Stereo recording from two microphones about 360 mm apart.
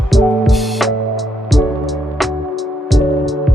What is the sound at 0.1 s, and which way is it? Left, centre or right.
Music, centre.